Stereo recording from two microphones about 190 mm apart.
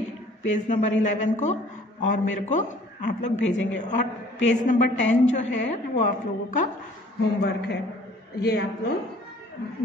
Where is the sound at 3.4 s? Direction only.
75° left (ahead or behind).